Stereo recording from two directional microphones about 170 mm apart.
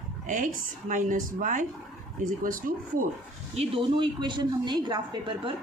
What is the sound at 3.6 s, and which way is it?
A woman's voice, 30° right (ahead or behind).